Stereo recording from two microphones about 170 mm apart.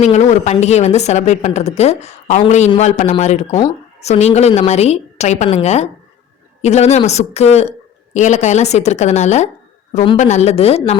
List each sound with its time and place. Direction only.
0.0 s a woman's voice: 40° left (ahead or behind)